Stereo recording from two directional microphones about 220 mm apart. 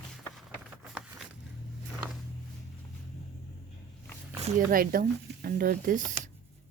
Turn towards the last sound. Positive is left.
turn(degrees=-35)  # may be behind; listen again after turning